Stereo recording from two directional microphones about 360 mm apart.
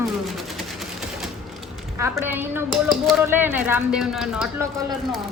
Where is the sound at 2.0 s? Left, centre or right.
Centre.